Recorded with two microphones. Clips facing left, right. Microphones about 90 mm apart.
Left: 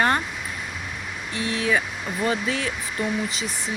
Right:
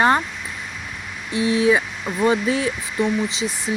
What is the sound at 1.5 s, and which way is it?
Speech, 25° right (ahead or behind).